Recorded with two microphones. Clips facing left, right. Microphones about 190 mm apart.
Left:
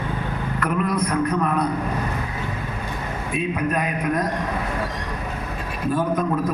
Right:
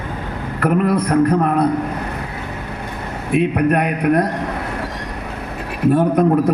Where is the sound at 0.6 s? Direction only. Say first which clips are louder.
Right 7 dB; 60° right (ahead or behind).